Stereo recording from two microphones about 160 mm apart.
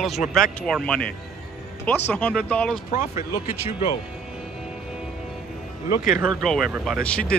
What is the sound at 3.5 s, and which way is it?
Speech, 40° left (ahead or behind).